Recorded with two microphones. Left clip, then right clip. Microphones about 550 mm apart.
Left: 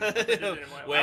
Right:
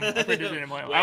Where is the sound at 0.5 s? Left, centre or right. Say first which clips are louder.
Right 6 dB; right.